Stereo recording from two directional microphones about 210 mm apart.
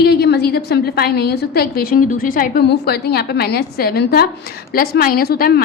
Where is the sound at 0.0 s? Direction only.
50° left (ahead or behind).